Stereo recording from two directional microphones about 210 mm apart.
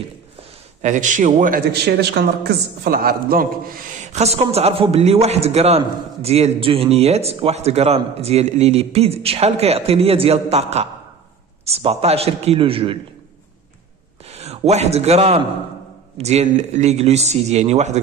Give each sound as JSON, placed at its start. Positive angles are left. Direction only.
{"t": 0.8, "sound": "a man's voice", "side_deg": -35}
{"t": 14.2, "sound": "a man's voice", "side_deg": -30}